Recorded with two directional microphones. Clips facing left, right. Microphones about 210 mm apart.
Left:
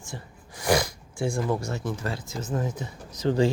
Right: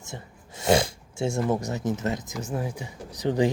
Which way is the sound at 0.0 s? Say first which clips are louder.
Even; 25° right (ahead or behind).